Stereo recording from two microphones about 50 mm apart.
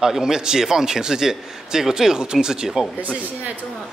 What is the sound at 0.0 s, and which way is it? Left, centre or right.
A man's voice, centre.